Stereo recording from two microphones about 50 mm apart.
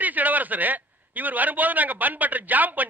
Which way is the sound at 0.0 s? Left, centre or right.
Right.